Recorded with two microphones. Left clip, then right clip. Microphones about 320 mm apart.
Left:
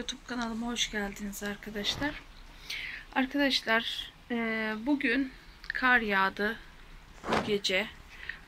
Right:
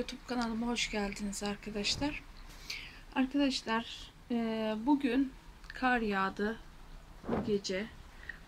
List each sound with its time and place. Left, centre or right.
0.0 s speech: centre
7.2 s speech: left
7.5 s speech: centre